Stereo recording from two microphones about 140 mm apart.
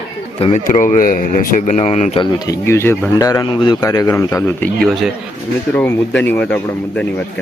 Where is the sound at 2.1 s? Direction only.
30° left (ahead or behind).